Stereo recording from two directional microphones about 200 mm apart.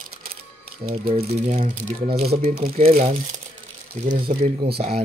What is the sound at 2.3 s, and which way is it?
Speech, 45° right (ahead or behind).